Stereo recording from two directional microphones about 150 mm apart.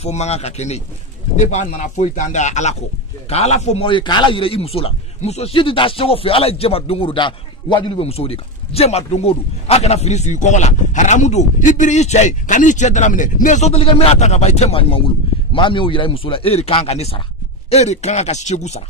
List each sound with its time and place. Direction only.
0.0 s a man's voice: 45° left (ahead or behind)